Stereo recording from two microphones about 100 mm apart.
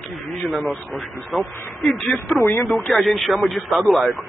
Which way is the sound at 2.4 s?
25° left (ahead or behind).